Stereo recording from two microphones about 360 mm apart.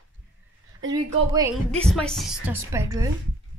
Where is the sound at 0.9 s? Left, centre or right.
Centre.